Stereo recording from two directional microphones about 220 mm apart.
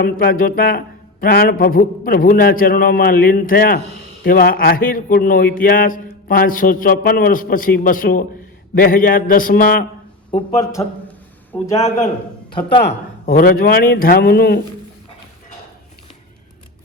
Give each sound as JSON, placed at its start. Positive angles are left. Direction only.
{"t": 0.0, "sound": "speech", "side_deg": 40}
{"t": 10.3, "sound": "speech", "side_deg": 15}
{"t": 11.5, "sound": "a man's voice", "side_deg": 25}
{"t": 12.9, "sound": "speech", "side_deg": 40}